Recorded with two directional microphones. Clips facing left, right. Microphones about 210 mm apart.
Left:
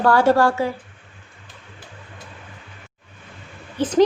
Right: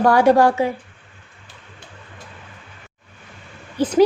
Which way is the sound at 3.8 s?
10° right (ahead or behind).